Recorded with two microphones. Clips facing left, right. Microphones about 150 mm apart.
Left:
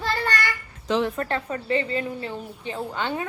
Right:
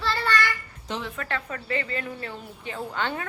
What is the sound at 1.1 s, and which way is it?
A woman's voice, 35° left (ahead or behind).